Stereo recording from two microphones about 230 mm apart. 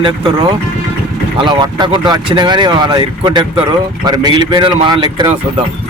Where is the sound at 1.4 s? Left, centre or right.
Centre.